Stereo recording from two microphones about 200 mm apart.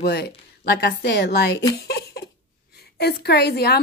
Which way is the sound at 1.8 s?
50° left (ahead or behind).